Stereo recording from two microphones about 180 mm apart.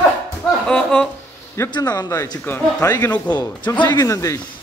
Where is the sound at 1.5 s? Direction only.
25° left (ahead or behind).